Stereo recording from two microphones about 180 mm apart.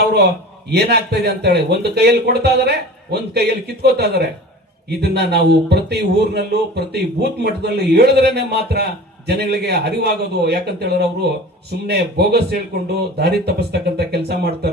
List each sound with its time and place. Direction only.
0.0 s a man's voice: 65° right (ahead or behind)